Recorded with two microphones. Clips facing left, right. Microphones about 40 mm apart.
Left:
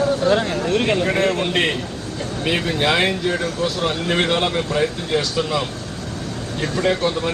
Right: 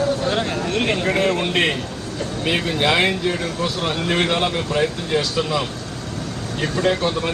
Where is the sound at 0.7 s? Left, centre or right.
Right.